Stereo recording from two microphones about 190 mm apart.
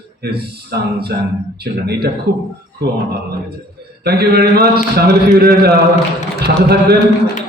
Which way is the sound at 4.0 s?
55° right (ahead or behind).